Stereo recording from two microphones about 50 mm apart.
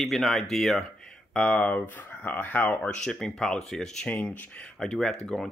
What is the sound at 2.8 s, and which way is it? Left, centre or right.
Speech, centre.